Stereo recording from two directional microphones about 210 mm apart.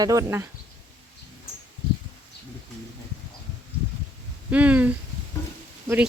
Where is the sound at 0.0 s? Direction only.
15° right (ahead or behind).